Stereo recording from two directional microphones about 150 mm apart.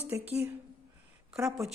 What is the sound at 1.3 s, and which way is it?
Speech, centre (ahead or behind).